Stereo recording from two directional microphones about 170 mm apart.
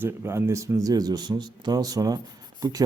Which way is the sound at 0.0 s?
15° right (ahead or behind).